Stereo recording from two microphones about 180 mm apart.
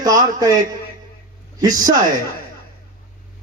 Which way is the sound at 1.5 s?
20° right (ahead or behind).